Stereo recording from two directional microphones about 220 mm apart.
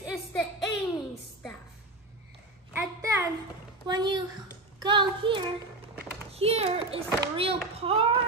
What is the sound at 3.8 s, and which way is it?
A child's voice, 20° right (ahead or behind).